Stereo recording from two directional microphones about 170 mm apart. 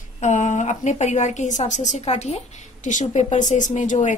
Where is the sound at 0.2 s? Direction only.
45° left (ahead or behind).